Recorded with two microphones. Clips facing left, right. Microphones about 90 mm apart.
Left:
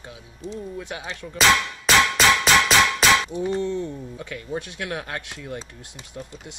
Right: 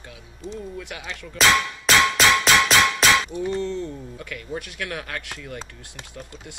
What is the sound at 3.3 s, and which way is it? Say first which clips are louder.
Speech: left 1 dB; 20° left (ahead or behind).